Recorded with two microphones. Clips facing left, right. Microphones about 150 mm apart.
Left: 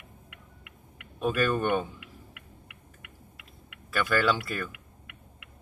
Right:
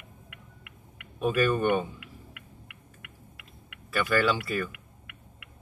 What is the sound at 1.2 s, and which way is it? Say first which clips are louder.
Speech: right 2 dB; 5° right (ahead or behind).